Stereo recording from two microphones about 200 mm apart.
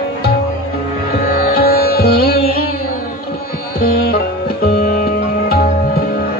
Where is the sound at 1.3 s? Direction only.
50° left (ahead or behind).